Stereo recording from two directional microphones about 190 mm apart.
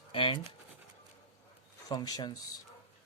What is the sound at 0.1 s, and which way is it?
Speech, 30° left (ahead or behind).